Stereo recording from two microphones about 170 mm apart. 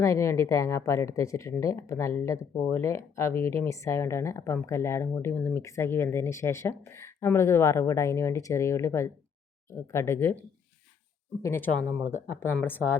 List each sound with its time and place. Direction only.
0.0 s a woman's voice: 15° left (ahead or behind)
11.4 s a woman's voice: 10° left (ahead or behind)